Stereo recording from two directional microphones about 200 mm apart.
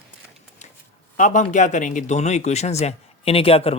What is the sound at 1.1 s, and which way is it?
A man's voice, 40° left (ahead or behind).